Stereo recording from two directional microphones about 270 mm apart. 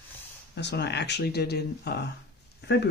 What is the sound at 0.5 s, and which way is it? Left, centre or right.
Speech, left.